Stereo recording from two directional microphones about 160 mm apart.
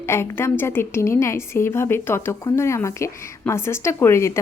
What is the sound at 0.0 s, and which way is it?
A woman's voice, 15° left (ahead or behind).